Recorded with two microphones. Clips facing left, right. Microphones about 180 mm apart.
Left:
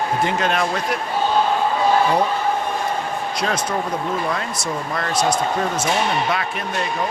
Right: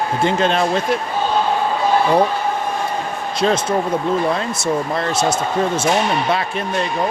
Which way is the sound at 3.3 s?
25° right (ahead or behind).